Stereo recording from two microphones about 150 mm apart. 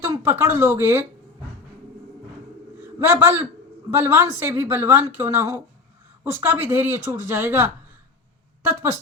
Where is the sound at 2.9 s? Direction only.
15° right (ahead or behind).